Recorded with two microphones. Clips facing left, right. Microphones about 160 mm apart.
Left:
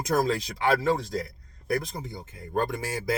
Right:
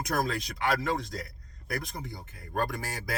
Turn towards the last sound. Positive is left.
turn(degrees=20)  # may be behind; listen again after turning